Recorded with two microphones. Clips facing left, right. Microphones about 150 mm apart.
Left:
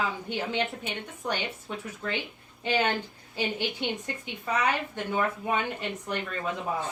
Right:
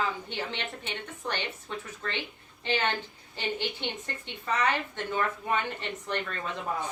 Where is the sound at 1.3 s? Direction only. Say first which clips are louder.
Left 3 dB; 10° left (ahead or behind).